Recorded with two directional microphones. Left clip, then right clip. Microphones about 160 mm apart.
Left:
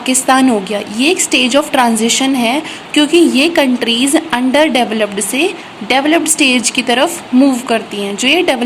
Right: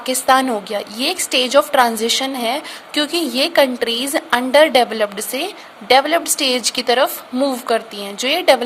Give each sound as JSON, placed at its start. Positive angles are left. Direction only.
{"t": 0.0, "sound": "a woman's voice", "side_deg": -40}